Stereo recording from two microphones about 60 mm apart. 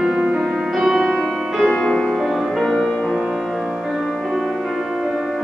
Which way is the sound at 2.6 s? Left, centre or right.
Centre.